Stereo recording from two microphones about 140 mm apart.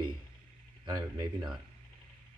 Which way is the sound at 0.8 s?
30° right (ahead or behind).